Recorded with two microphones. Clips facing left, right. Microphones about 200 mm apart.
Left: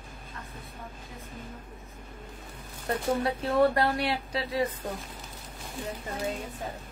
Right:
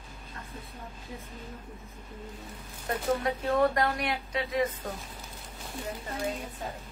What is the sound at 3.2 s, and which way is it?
A woman's voice, 30° left (ahead or behind).